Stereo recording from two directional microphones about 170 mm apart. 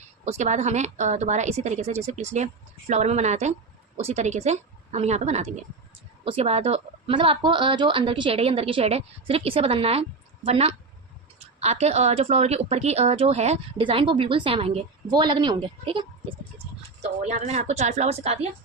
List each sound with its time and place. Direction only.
0.3 s a woman's voice: 40° right (ahead or behind)
17.0 s a woman's voice: 45° right (ahead or behind)